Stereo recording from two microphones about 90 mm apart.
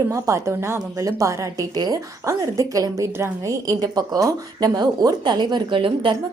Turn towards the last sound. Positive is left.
turn(degrees=-70)  # may be behind; listen again after turning